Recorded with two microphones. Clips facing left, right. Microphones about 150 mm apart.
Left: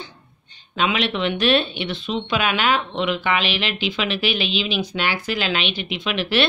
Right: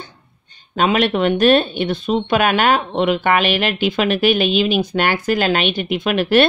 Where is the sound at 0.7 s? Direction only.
45° right (ahead or behind).